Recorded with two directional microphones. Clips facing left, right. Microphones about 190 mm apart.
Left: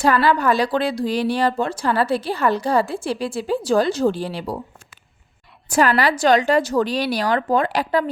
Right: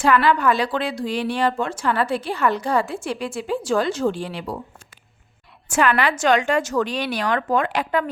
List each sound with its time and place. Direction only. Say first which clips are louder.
0.0 s speech: even; 35° left (ahead or behind)
5.6 s speech: left 2 dB; 35° left (ahead or behind)